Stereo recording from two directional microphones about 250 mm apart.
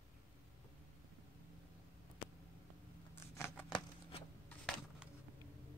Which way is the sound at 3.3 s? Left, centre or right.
Centre.